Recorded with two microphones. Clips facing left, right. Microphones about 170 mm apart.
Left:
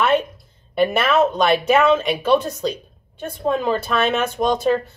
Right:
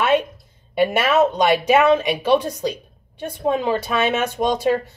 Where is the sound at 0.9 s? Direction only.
10° right (ahead or behind).